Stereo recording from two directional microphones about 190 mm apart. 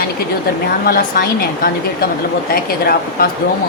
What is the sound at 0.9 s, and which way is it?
Speech, 55° left (ahead or behind).